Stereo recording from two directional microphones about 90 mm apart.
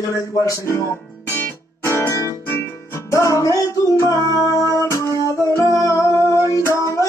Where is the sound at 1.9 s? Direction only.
30° left (ahead or behind).